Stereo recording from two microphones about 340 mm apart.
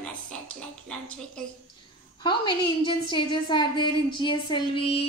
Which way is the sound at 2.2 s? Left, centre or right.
Centre.